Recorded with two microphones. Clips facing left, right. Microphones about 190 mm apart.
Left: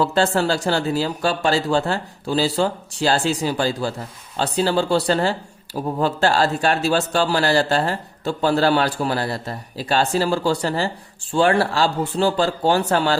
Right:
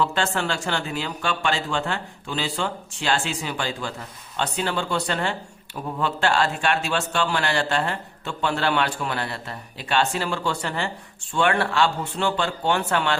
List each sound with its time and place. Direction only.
0.0 s speech: 35° left (ahead or behind)